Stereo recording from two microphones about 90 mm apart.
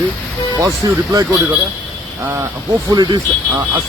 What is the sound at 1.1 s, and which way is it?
Speech, 35° right (ahead or behind).